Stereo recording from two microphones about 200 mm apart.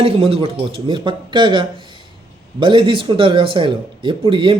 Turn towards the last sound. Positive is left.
turn(degrees=-25)  # may be behind; listen again after turning